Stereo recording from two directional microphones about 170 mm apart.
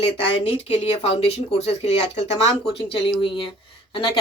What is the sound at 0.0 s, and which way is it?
Speech, 35° left (ahead or behind).